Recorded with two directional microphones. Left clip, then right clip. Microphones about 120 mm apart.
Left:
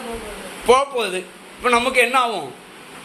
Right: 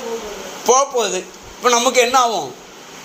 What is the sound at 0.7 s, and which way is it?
Speech, 25° right (ahead or behind).